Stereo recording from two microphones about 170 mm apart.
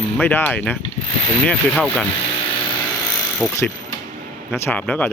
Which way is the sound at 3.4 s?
5° left (ahead or behind).